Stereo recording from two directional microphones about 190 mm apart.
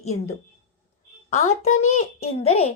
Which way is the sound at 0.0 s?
35° left (ahead or behind).